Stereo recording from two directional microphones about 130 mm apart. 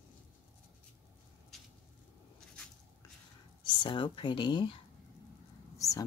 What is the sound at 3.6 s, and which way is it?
Speech, 40° left (ahead or behind).